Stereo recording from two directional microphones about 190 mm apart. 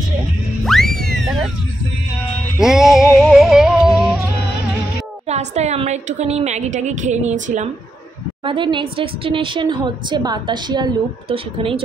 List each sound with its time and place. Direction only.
0.7 s music: centre (ahead or behind)
2.6 s music: centre (ahead or behind)
5.3 s a woman's voice: 35° right (ahead or behind)
8.5 s a woman's voice: 25° right (ahead or behind)